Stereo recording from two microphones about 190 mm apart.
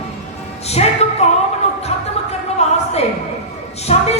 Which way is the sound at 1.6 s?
35° left (ahead or behind).